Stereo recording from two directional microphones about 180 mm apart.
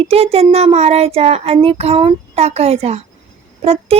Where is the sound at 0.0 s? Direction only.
35° right (ahead or behind).